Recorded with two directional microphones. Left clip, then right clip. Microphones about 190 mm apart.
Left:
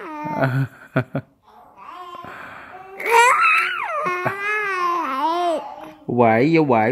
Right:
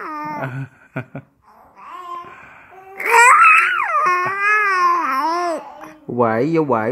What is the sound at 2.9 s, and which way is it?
Babbling, 5° right (ahead or behind).